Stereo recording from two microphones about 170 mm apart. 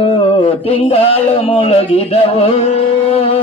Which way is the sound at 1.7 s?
35° left (ahead or behind).